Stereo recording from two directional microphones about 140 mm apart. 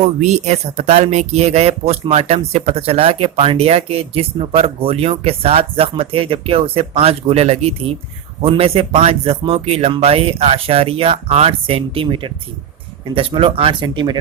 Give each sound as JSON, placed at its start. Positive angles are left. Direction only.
{"t": 0.2, "sound": "speech", "side_deg": -50}